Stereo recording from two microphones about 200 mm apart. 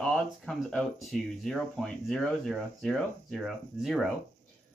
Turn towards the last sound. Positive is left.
turn(degrees=0)  # may be behind; listen again after turning